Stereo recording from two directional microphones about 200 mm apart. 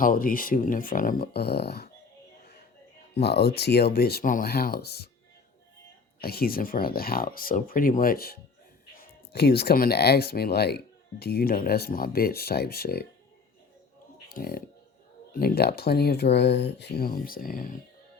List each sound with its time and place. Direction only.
0.0 s speech: 45° left (ahead or behind)
3.2 s speech: 55° left (ahead or behind)
6.1 s speech: 50° left (ahead or behind)
14.3 s speech: 45° left (ahead or behind)